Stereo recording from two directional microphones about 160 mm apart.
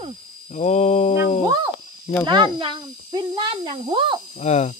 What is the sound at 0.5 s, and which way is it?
Music, 45° left (ahead or behind).